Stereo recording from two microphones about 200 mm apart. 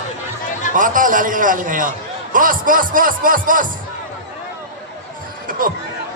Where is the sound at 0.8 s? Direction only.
40° right (ahead or behind).